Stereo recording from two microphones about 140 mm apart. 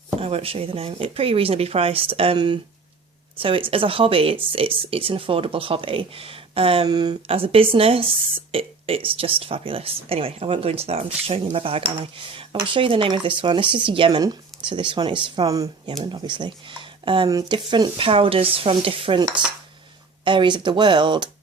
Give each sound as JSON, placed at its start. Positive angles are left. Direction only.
{"t": 0.2, "sound": "speech", "side_deg": -45}
{"t": 7.3, "sound": "speech", "side_deg": -40}
{"t": 15.9, "sound": "speech", "side_deg": -35}
{"t": 20.2, "sound": "speech", "side_deg": -35}